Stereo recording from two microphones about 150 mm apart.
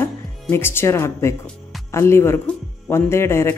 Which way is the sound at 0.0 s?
15° left (ahead or behind).